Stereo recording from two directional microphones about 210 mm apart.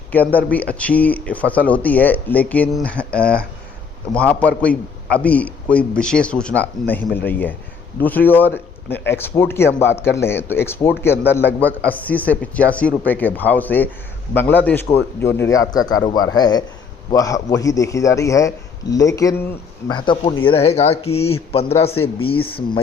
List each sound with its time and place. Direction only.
0.1 s speech: 10° left (ahead or behind); by 22.4 s 25° left (ahead or behind)